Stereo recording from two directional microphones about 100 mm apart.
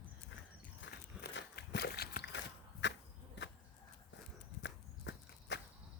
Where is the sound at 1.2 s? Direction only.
5° right (ahead or behind).